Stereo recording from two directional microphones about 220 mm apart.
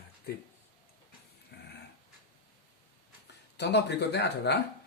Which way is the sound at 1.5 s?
50° left (ahead or behind).